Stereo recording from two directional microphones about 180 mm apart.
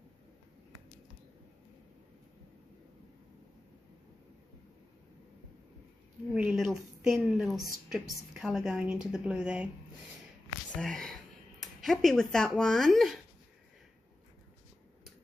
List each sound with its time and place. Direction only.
6.3 s a woman's voice: 5° right (ahead or behind)
10.8 s a woman's voice: 5° left (ahead or behind)